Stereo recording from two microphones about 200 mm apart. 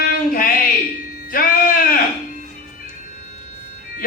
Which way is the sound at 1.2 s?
45° left (ahead or behind).